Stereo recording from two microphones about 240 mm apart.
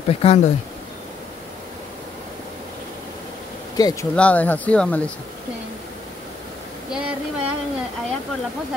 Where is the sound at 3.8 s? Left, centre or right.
Centre.